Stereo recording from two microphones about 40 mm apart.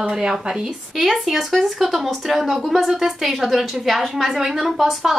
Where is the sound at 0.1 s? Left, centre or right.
Centre.